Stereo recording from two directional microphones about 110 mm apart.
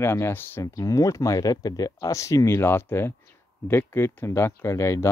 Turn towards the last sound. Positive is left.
turn(degrees=25)  # may be behind; listen again after turning